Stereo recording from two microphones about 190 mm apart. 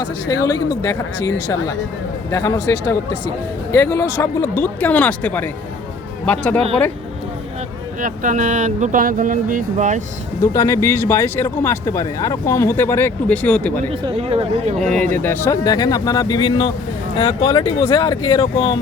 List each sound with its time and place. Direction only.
0.0 s speech: 20° left (ahead or behind)
8.0 s speech: 45° right (ahead or behind)
10.4 s speech: 15° left (ahead or behind)
13.9 s speech: 30° right (ahead or behind)
14.8 s speech: 5° left (ahead or behind); by 18.8 s 25° left (ahead or behind)